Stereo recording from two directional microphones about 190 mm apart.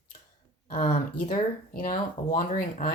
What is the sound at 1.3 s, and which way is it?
Speech, 45° left (ahead or behind).